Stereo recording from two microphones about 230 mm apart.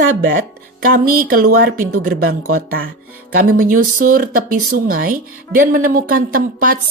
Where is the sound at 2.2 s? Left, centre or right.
Right.